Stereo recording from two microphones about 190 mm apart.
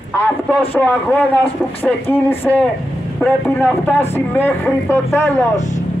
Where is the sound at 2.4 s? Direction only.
5° left (ahead or behind).